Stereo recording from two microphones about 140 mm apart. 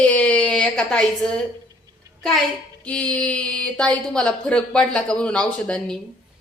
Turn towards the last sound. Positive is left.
turn(degrees=5)  # may be behind; listen again after turning